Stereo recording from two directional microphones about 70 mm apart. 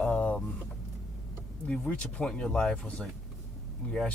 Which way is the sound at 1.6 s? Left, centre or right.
Centre.